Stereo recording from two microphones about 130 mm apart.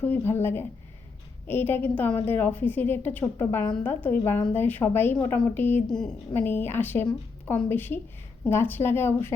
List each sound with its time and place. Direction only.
0.0 s a woman's voice: 15° left (ahead or behind)